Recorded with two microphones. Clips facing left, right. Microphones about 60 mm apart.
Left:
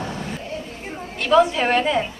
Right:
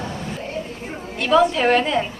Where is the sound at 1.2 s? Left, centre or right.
Centre.